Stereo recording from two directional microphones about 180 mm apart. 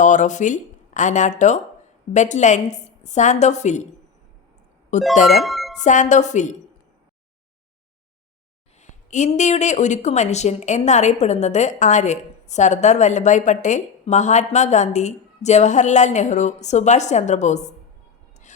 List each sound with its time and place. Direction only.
0.0 s speech: 45° left (ahead or behind)
4.9 s speech: 40° left (ahead or behind)
5.4 s music: centre (ahead or behind)
5.8 s a woman's voice: 45° left (ahead or behind)
8.8 s a woman's voice: 45° left (ahead or behind)